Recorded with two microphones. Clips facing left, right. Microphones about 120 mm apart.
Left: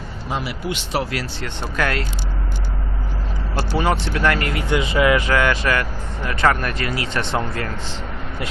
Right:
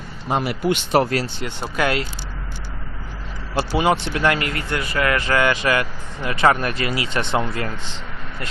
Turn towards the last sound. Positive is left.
turn(degrees=-10)  # may be behind; listen again after turning